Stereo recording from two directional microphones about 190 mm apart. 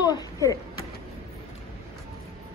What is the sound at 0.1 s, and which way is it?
Speech, 15° left (ahead or behind).